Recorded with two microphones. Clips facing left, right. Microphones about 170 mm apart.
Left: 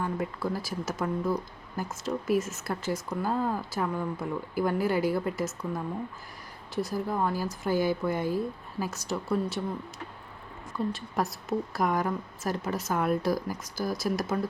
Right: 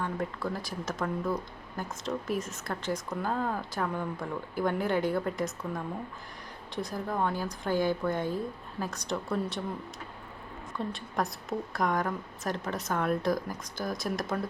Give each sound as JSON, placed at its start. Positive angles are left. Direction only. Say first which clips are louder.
{"t": 0.0, "sound": "speech", "louder": "left 2 dB", "side_deg": 5}
{"t": 6.8, "sound": "speech", "louder": "left 1 dB", "side_deg": 5}
{"t": 10.9, "sound": "speech", "louder": "left 2 dB", "side_deg": 5}